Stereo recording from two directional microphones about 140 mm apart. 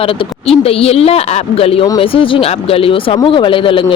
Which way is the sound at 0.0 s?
45° left (ahead or behind).